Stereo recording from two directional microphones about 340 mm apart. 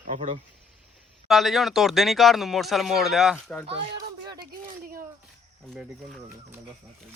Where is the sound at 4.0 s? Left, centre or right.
Centre.